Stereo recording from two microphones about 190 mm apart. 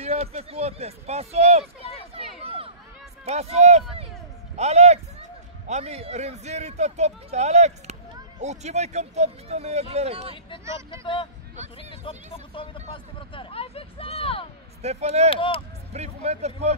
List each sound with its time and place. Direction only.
0.0 s speech: 35° right (ahead or behind)
2.1 s a sound: 30° right (ahead or behind)
3.3 s speech: 35° right (ahead or behind)
10.9 s speech: 25° left (ahead or behind)
14.8 s speech: 35° right (ahead or behind)
15.2 s speech: 30° left (ahead or behind)
15.9 s speech: 35° right (ahead or behind)